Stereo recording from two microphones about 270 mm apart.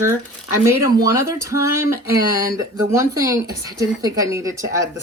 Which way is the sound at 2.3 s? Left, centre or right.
Centre.